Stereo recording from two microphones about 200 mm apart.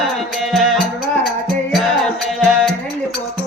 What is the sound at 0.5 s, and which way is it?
Music, centre (ahead or behind).